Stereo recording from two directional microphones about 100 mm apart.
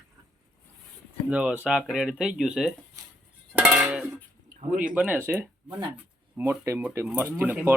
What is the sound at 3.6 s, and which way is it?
Music, 10° right (ahead or behind).